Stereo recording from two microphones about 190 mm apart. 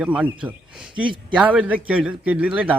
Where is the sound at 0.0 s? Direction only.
5° right (ahead or behind).